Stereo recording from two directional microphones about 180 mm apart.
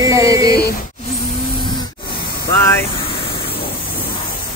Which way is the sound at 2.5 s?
15° left (ahead or behind).